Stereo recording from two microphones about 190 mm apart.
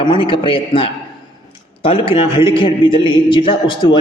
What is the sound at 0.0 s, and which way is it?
A man's voice, 25° left (ahead or behind).